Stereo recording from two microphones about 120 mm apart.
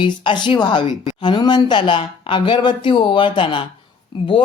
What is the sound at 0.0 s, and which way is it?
A man's voice, 45° left (ahead or behind).